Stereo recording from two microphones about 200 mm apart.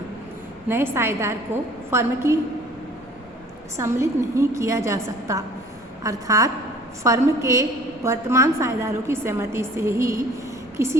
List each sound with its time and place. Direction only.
0.7 s a woman's voice: 10° right (ahead or behind)
3.8 s a woman's voice: 15° right (ahead or behind)